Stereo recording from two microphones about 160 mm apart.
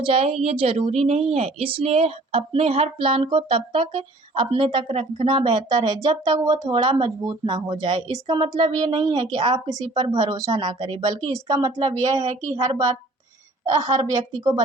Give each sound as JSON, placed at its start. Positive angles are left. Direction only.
{"t": 0.0, "sound": "speech", "side_deg": -35}